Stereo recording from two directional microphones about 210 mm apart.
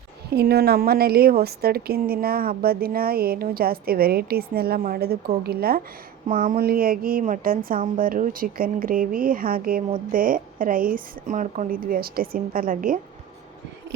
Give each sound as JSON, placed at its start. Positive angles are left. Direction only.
{"t": 0.3, "sound": "a woman's voice", "side_deg": -50}